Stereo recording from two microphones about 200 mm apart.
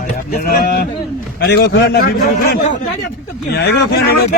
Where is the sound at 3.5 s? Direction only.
55° left (ahead or behind).